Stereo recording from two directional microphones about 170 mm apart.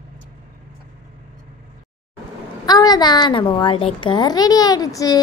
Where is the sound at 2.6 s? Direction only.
25° left (ahead or behind).